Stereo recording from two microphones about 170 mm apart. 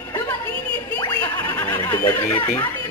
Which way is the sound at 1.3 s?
10° left (ahead or behind).